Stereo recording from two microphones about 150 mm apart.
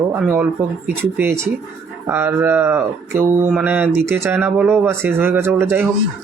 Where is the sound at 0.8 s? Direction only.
15° right (ahead or behind).